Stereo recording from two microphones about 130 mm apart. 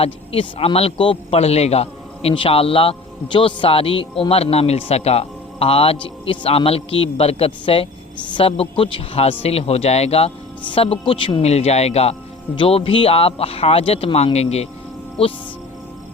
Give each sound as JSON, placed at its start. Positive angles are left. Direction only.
{"t": 0.0, "sound": "a man's voice", "side_deg": 45}